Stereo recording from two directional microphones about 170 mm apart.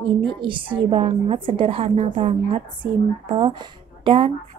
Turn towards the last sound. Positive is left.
turn(degrees=-30)  # may be behind; listen again after turning